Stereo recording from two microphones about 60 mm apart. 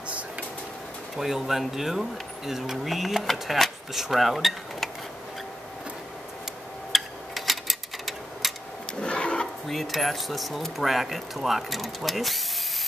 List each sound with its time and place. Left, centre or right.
1.1 s speech: centre
6.9 s a sound: centre
9.0 s roaring cats: centre
9.7 s speech: centre